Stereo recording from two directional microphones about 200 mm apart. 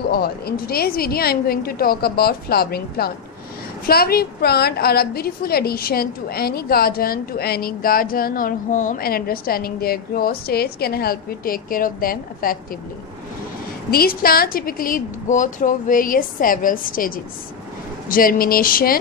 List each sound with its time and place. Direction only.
0.1 s a woman's voice: 50° left (ahead or behind)
13.8 s a woman's voice: 50° left (ahead or behind)